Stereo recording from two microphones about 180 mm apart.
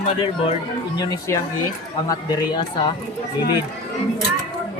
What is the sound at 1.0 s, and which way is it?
A man's voice, 20° left (ahead or behind).